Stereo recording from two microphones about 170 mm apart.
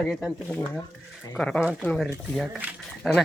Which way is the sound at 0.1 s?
Centre (ahead or behind).